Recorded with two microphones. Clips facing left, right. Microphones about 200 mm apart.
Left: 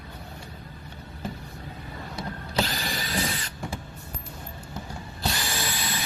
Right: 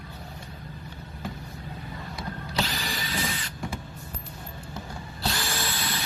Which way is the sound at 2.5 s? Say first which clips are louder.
Left 3 dB; 45° left (ahead or behind).